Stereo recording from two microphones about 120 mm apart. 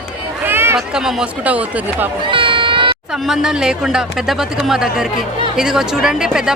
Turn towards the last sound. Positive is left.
turn(degrees=-5)  # may be behind; listen again after turning